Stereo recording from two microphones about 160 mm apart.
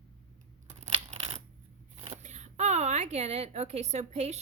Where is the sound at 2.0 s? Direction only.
45° right (ahead or behind).